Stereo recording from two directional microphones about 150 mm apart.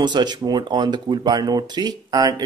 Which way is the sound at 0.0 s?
30° right (ahead or behind).